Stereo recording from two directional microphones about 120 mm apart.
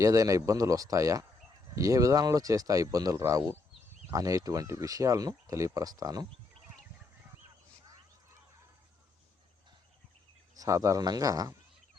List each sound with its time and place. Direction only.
0.0 s speech: 30° right (ahead or behind)
10.5 s speech: 30° right (ahead or behind)